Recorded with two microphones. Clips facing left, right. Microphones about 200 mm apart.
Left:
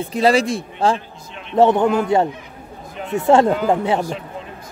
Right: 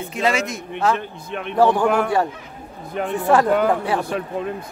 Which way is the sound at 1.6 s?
25° left (ahead or behind).